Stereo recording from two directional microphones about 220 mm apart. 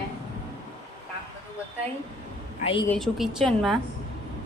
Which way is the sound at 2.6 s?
25° left (ahead or behind).